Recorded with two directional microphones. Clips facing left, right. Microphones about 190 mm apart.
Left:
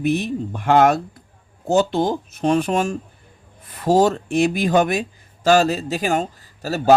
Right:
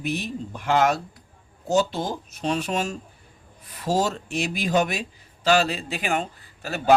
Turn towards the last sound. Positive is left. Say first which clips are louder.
# left 7 dB
turn(degrees=40)  # may be behind; listen again after turning